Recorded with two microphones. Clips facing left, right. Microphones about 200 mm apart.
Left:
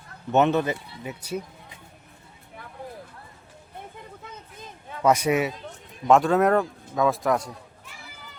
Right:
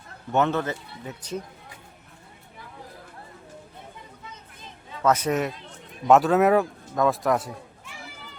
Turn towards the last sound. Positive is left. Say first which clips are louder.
# even
turn(degrees=0)  # may be behind; listen again after turning